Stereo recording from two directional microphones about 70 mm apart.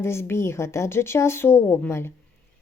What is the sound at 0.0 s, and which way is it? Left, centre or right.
A woman's voice, left.